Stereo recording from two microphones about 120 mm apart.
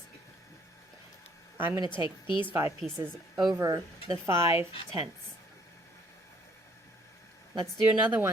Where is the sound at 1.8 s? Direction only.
40° left (ahead or behind).